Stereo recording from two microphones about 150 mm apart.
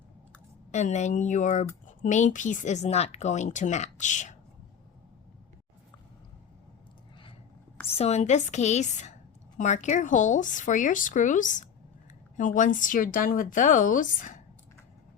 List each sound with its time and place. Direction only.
0.7 s speech: 50° left (ahead or behind)
7.9 s speech: 45° left (ahead or behind); by 14.4 s 60° left (ahead or behind)